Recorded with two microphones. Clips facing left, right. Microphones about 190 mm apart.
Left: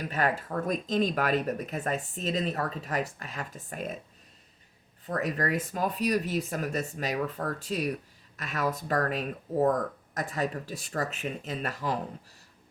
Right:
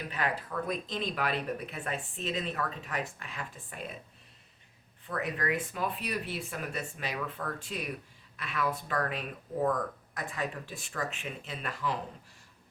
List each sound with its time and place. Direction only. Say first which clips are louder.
0.1 s speech: left 5 dB; 45° left (ahead or behind)
5.0 s speech: left 3 dB; 40° left (ahead or behind)